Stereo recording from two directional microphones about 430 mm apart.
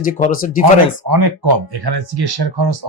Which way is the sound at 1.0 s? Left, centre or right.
Right.